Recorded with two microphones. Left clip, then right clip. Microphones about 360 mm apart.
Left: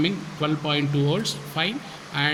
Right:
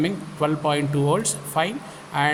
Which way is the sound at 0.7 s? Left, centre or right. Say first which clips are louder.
Right 2 dB; centre.